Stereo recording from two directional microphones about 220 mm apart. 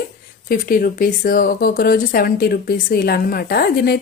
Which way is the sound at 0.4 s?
40° left (ahead or behind).